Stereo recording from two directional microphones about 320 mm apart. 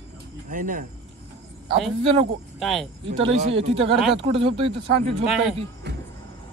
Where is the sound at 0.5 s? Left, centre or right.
Right.